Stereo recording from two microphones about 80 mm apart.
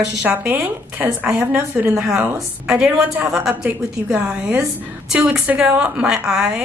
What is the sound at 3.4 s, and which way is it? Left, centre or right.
Speech, centre.